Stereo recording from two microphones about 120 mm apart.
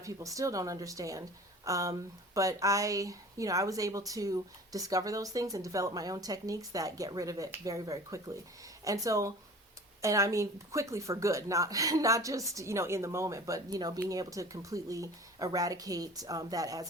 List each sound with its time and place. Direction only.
0.0 s a woman's voice: 25° right (ahead or behind)